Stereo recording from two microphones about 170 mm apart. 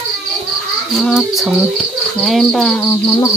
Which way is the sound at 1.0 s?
Centre (ahead or behind).